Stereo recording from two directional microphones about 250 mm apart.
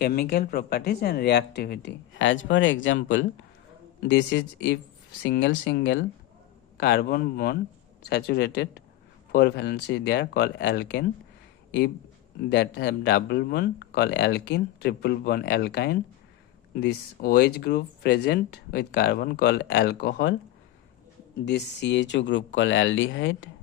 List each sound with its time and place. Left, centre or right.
0.0 s speech: left
12.5 s speech: left
21.4 s speech: left